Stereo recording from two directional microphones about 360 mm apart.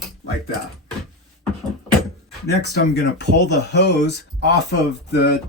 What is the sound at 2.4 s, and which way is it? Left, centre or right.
Speech, left.